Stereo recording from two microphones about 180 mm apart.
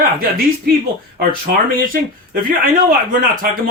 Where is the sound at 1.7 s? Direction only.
50° right (ahead or behind).